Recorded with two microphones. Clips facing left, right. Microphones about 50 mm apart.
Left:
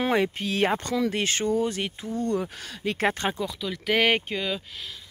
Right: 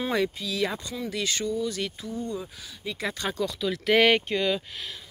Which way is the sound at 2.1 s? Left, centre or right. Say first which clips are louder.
Left 9 dB; left.